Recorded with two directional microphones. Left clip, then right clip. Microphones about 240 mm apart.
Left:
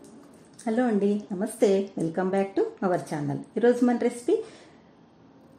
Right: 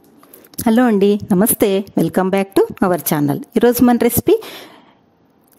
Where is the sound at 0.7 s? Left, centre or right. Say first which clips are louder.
Right 12 dB; right.